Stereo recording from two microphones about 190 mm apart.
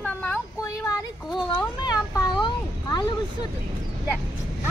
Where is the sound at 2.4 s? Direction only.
25° left (ahead or behind).